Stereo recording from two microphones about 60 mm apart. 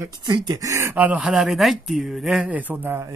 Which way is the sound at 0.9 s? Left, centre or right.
Right.